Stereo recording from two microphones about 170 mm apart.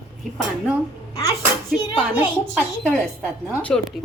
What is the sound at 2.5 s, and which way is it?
A woman's voice, 5° left (ahead or behind).